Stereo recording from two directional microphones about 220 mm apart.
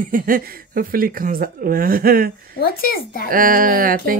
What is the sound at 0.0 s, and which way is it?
Speech, 40° right (ahead or behind).